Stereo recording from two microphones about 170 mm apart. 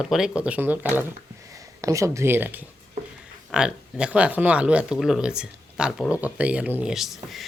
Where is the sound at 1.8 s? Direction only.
20° right (ahead or behind).